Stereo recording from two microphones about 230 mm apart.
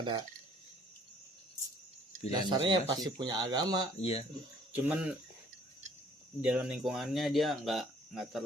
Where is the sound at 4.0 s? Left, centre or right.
Left.